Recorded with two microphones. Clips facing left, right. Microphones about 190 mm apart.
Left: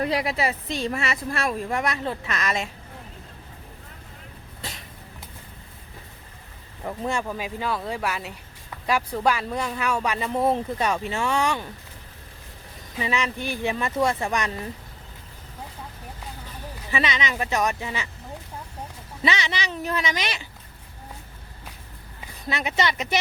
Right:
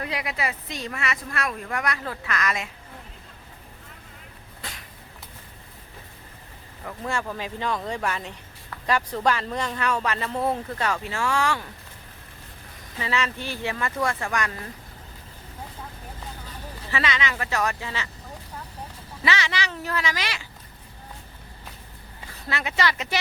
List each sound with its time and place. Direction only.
0.0 s a woman's voice: 35° left (ahead or behind)
6.8 s speech: 20° left (ahead or behind)
13.0 s a woman's voice: 15° left (ahead or behind)
16.9 s a woman's voice: 20° left (ahead or behind)
19.2 s a woman's voice: 20° left (ahead or behind)
22.4 s a woman's voice: 20° left (ahead or behind)